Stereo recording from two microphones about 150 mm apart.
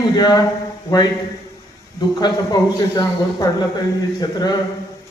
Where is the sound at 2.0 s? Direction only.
30° left (ahead or behind).